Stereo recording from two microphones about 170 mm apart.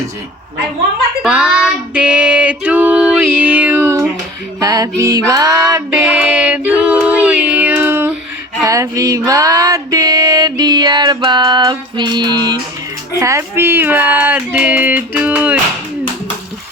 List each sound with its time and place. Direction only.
1.2 s female singing: 5° right (ahead or behind)
4.6 s music: 20° right (ahead or behind)
13.1 s a sound: 15° right (ahead or behind)